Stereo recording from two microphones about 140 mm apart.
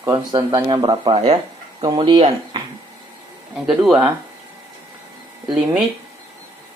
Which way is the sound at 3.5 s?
5° right (ahead or behind).